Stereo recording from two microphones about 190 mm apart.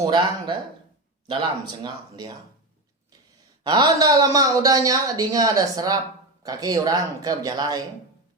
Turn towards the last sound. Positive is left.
turn(degrees=-20)  # may be behind; listen again after turning